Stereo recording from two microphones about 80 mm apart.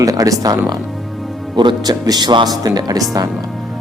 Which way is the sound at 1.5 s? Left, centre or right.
Right.